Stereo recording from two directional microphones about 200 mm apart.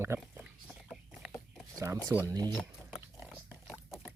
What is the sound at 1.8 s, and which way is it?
Speech, 15° right (ahead or behind).